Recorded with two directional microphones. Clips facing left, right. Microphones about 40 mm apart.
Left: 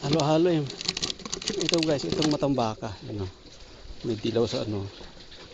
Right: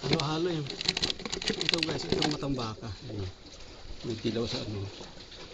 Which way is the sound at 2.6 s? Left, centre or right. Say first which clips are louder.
Left 9 dB; left.